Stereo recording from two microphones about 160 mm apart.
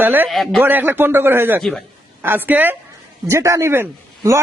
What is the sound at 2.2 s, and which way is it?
A man's voice, 15° right (ahead or behind).